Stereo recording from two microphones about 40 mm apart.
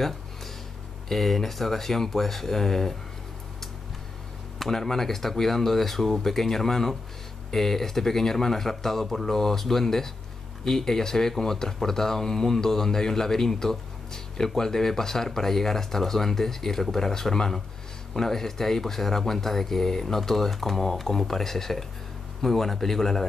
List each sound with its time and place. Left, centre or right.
1.0 s speech: centre
4.6 s speech: centre